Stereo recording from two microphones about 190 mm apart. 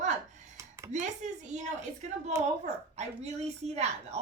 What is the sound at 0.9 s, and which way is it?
Speech, 40° right (ahead or behind).